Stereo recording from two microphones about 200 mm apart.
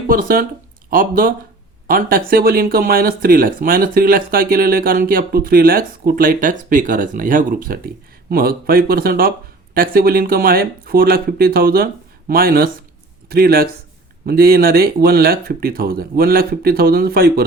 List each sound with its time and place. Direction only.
0.1 s speech: 45° right (ahead or behind)